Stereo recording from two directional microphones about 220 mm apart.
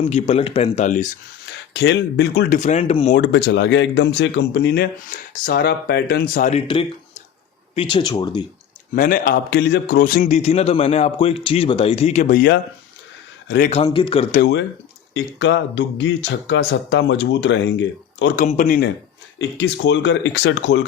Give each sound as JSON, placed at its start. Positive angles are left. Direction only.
{"t": 0.0, "sound": "a man's voice", "side_deg": 30}
{"t": 1.7, "sound": "speech", "side_deg": 55}
{"t": 2.6, "sound": "speech", "side_deg": 30}
{"t": 3.2, "sound": "a man's voice", "side_deg": 50}
{"t": 7.8, "sound": "speech", "side_deg": 25}
{"t": 9.0, "sound": "a man's voice", "side_deg": 40}
{"t": 13.8, "sound": "speech", "side_deg": 25}
{"t": 14.3, "sound": "a man's voice", "side_deg": 35}
{"t": 15.1, "sound": "speech", "side_deg": 55}
{"t": 18.3, "sound": "a man's voice", "side_deg": 35}
{"t": 19.4, "sound": "speech", "side_deg": 55}